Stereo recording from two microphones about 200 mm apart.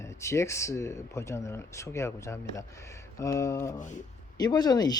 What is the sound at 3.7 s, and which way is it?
Speech, 40° left (ahead or behind).